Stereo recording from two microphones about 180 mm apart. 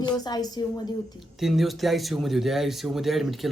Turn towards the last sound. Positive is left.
turn(degrees=0)  # may be behind; listen again after turning